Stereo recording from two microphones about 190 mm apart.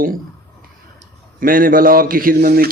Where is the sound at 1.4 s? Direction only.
50° right (ahead or behind).